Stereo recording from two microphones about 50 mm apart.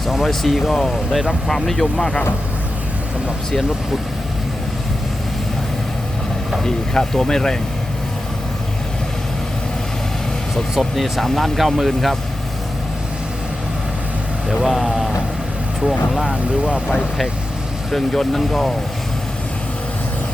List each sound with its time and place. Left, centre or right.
0.3 s speech: centre
6.6 s speech: centre
10.5 s speech: centre
14.5 s speech: centre
16.3 s speech: right
17.9 s speech: centre